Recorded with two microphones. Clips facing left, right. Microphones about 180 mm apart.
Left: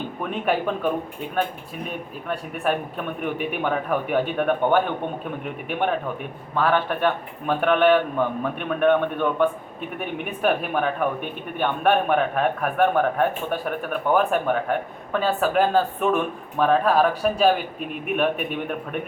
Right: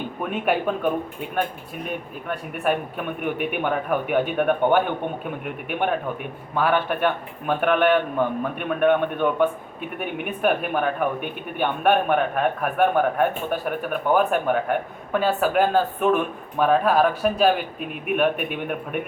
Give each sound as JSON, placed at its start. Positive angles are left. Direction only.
{"t": 0.2, "sound": "speech", "side_deg": -5}
{"t": 2.2, "sound": "speech", "side_deg": -5}
{"t": 6.6, "sound": "speech", "side_deg": -5}